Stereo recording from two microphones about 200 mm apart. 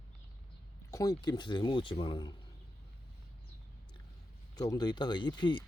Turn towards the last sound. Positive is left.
turn(degrees=20)  # may be behind; listen again after turning